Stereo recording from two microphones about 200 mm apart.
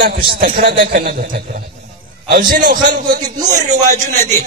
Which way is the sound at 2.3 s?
45° right (ahead or behind).